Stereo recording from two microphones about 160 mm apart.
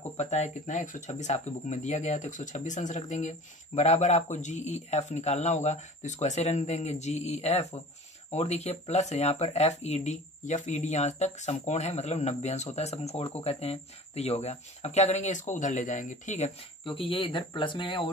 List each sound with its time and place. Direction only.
0.2 s speech: 45° left (ahead or behind)
16.8 s speech: 35° left (ahead or behind)